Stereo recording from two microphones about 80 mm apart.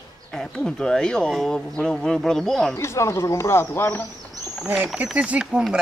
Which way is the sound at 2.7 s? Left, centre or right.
Left.